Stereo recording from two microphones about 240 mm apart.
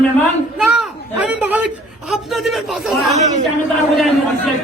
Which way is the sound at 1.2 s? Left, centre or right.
Centre.